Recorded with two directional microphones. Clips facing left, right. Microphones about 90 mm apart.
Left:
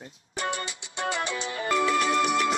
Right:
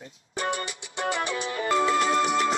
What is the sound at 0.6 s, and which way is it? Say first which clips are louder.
Music: right 1 dB; 20° left (ahead or behind).